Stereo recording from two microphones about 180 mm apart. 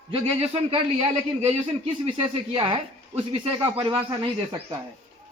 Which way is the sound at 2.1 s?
30° right (ahead or behind).